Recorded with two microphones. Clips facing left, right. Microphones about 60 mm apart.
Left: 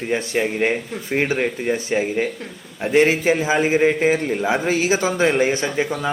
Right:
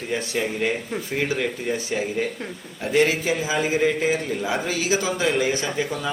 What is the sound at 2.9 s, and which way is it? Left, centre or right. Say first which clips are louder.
A man's voice: left 4 dB; left.